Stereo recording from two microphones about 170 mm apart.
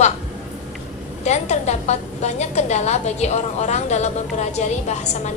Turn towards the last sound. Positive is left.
turn(degrees=40)  # may be behind; listen again after turning